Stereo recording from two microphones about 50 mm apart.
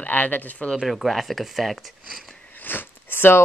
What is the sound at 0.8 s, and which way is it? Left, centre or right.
Speech, centre.